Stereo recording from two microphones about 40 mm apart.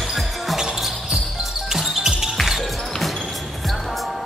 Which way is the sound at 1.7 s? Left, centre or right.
Centre.